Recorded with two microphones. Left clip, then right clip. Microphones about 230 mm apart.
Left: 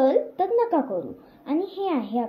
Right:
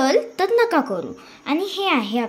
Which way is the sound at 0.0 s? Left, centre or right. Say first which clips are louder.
Right 2 dB; right.